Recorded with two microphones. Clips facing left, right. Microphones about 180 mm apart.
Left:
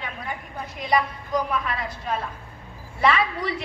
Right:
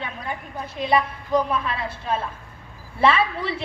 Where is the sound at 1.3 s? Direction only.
25° right (ahead or behind).